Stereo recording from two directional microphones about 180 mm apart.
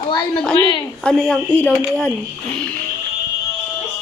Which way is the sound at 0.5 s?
25° left (ahead or behind).